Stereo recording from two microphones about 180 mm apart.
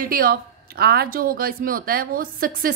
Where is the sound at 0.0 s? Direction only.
55° right (ahead or behind).